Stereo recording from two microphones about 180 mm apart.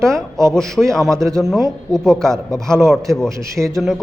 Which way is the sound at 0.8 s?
5° left (ahead or behind).